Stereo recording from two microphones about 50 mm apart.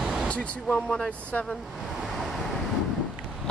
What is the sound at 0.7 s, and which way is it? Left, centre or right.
Speech, centre.